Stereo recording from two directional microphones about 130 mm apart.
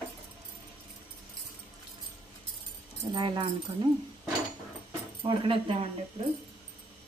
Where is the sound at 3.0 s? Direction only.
35° right (ahead or behind).